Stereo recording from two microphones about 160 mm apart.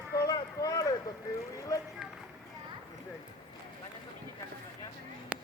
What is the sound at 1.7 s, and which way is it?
Run, 20° left (ahead or behind).